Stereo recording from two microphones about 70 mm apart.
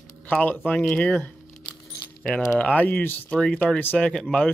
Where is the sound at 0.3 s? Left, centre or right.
Centre.